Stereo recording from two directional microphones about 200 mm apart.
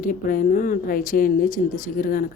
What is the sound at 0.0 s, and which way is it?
Speech, 45° left (ahead or behind).